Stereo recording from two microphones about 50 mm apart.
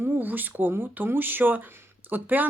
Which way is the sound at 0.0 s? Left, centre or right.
Right.